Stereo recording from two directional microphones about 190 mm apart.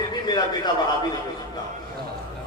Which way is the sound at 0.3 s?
20° left (ahead or behind).